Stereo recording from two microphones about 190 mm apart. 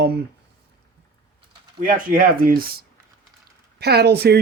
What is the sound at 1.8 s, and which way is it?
Speech, 45° right (ahead or behind).